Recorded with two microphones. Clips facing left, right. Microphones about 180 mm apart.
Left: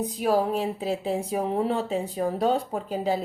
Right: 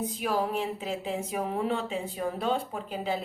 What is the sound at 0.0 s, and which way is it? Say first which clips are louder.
A woman's voice: left 5 dB; 40° left (ahead or behind).